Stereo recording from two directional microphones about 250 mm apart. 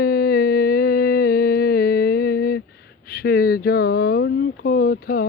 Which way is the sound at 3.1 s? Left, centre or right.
Left.